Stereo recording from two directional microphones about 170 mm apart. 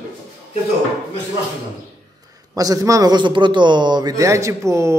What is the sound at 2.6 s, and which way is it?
Speech, 20° right (ahead or behind).